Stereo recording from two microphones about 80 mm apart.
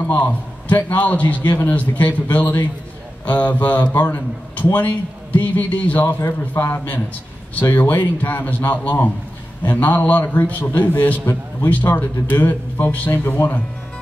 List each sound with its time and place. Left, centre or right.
0.0 s a man's voice: left